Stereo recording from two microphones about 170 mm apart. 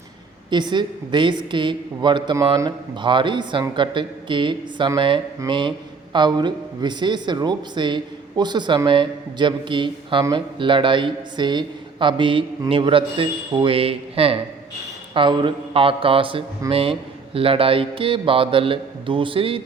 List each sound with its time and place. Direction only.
0.5 s a woman's voice: 25° right (ahead or behind)